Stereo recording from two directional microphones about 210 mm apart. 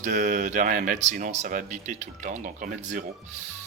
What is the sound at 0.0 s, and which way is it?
Speech, 35° right (ahead or behind).